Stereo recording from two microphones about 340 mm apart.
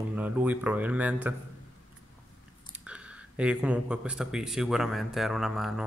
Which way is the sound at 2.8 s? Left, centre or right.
Centre.